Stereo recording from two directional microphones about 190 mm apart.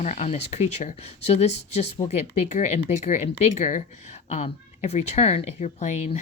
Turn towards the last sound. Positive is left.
turn(degrees=35)  # may be behind; listen again after turning